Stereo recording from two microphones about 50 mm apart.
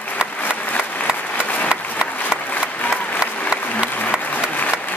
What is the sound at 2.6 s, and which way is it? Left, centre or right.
Applause, left.